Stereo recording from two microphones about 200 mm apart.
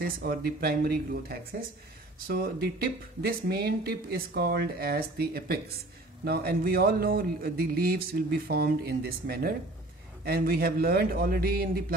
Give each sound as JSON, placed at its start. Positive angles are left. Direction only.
{"t": 0.0, "sound": "speech", "side_deg": -50}